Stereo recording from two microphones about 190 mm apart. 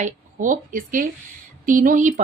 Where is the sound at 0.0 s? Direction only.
40° right (ahead or behind).